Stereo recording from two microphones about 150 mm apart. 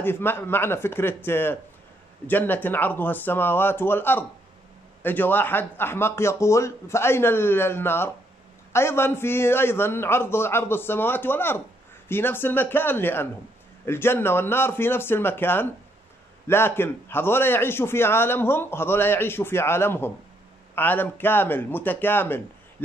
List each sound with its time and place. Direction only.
0.0 s a man's voice: 15° left (ahead or behind)